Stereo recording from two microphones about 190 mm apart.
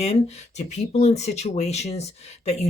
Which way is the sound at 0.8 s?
35° left (ahead or behind).